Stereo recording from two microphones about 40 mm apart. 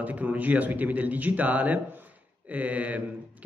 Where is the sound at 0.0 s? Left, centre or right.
Right.